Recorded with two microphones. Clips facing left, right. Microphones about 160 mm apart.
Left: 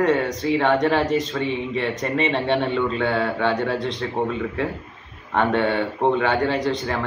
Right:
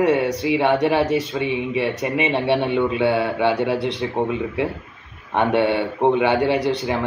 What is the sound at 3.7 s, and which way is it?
Speech, 65° right (ahead or behind).